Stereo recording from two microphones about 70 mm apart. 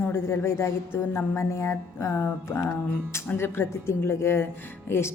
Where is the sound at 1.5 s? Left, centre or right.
Left.